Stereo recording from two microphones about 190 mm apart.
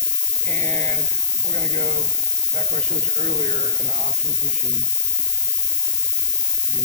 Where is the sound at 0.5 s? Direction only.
40° right (ahead or behind).